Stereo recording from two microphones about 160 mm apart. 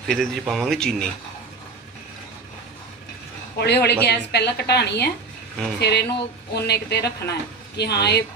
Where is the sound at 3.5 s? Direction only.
90° left.